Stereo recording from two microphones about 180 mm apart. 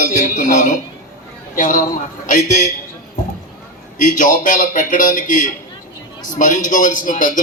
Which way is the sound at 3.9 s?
45° left (ahead or behind).